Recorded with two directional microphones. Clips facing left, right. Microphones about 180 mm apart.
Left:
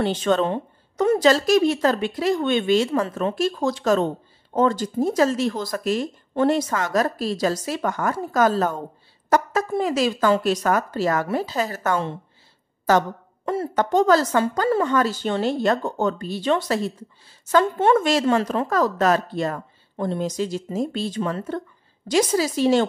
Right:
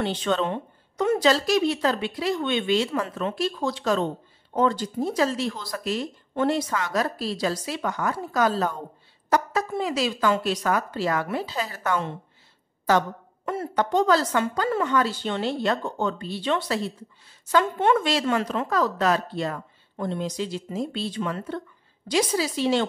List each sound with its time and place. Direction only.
0.0 s a woman's voice: 45° left (ahead or behind)